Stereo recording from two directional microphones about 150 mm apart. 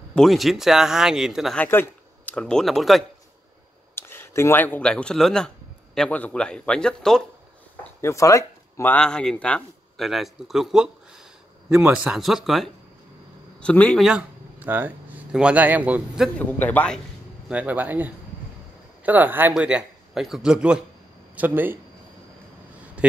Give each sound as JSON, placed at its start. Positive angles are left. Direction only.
{"t": 0.1, "sound": "speech", "side_deg": 0}
{"t": 1.6, "sound": "speech", "side_deg": 10}
{"t": 3.9, "sound": "speech", "side_deg": 15}
{"t": 8.0, "sound": "speech", "side_deg": 20}
{"t": 8.9, "sound": "a man's voice", "side_deg": 5}
{"t": 14.0, "sound": "speech", "side_deg": -10}
{"t": 16.3, "sound": "a man's voice", "side_deg": 10}
{"t": 17.5, "sound": "speech", "side_deg": -10}